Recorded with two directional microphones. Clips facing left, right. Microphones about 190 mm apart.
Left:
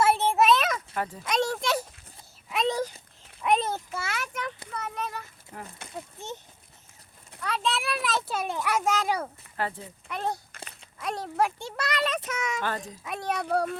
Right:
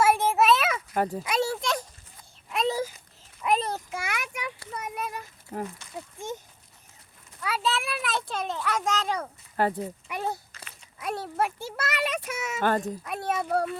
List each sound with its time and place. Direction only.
0.0 s a sound: 10° right (ahead or behind)
0.9 s speech: 40° right (ahead or behind)
1.2 s a child's voice: 5° right (ahead or behind)
1.6 s a sound: 5° left (ahead or behind)
3.9 s a sound: 15° right (ahead or behind)
4.7 s child singing: 10° right (ahead or behind)
5.5 s speech: 30° right (ahead or behind)
6.1 s speech: 10° right (ahead or behind)
7.4 s a child's voice: 5° right (ahead or behind)
9.6 s speech: 45° right (ahead or behind)
10.1 s a child's voice: 10° right (ahead or behind)